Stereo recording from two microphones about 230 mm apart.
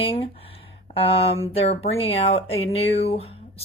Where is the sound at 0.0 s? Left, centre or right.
Left.